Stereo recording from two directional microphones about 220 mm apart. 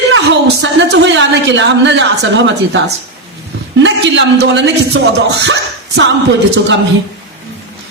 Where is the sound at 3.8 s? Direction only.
55° right (ahead or behind).